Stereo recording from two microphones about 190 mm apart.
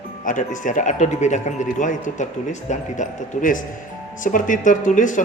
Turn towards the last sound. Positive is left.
turn(degrees=40)  # may be behind; listen again after turning